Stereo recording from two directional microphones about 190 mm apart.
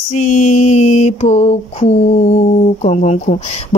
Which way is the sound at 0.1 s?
40° left (ahead or behind).